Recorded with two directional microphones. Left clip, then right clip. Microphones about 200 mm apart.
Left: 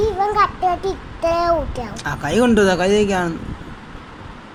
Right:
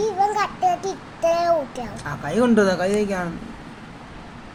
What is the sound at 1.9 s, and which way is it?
A woman's voice, 25° left (ahead or behind).